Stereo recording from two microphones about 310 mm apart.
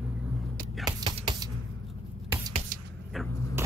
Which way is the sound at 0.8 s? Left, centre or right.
Centre.